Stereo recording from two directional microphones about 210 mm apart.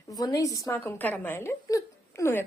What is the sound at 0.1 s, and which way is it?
A woman's voice, 15° left (ahead or behind).